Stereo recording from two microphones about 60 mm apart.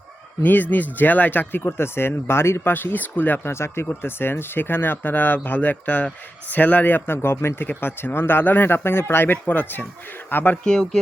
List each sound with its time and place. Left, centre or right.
0.4 s speech: left
3.5 s speech: left
10.7 s speech: centre